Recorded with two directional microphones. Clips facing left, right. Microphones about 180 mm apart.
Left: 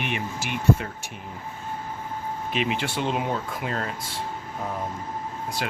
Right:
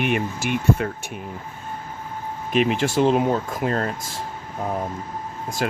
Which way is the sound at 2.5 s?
45° right (ahead or behind).